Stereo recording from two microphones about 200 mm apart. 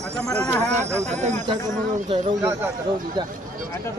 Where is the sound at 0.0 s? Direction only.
5° left (ahead or behind).